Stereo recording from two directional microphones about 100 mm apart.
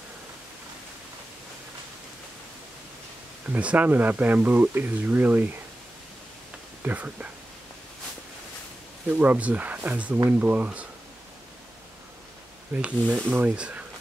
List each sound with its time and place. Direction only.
3.4 s speech: 15° right (ahead or behind)
6.8 s speech: 15° right (ahead or behind)
9.1 s speech: 20° right (ahead or behind)
12.7 s speech: 10° right (ahead or behind)